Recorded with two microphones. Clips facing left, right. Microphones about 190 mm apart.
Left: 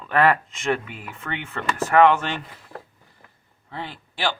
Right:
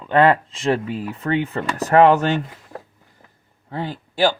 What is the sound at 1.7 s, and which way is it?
Speech, 35° right (ahead or behind).